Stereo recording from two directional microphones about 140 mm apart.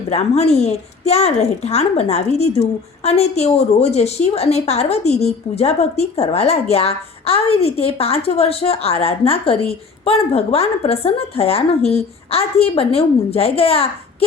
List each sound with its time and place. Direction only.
0.1 s a woman's voice: 50° left (ahead or behind)